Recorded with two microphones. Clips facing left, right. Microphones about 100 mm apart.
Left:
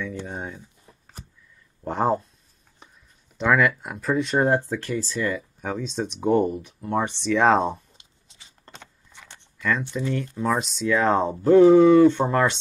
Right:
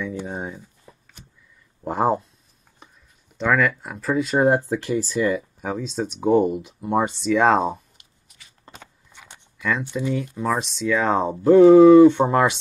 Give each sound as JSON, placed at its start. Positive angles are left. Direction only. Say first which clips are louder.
{"t": 0.0, "sound": "a sound", "louder": "right 3 dB", "side_deg": -15}
{"t": 1.9, "sound": "speech", "louder": "right 2 dB", "side_deg": -5}
{"t": 3.3, "sound": "speech", "louder": "even", "side_deg": 0}
{"t": 6.4, "sound": "speech", "louder": "right 3 dB", "side_deg": -15}
{"t": 7.2, "sound": "speech", "louder": "even", "side_deg": 0}
{"t": 8.0, "sound": "a sound", "louder": "even", "side_deg": 25}
{"t": 8.6, "sound": "speech", "louder": "right 1 dB", "side_deg": -5}
{"t": 11.9, "sound": "speech", "louder": "right 4 dB", "side_deg": -15}